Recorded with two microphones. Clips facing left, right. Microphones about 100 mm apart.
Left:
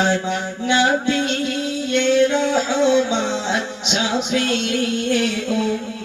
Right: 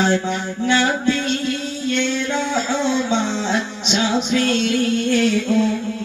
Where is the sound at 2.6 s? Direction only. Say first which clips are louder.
Left 3 dB; 15° left (ahead or behind).